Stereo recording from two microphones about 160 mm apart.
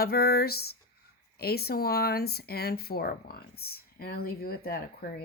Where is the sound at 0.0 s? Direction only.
75° left (ahead or behind).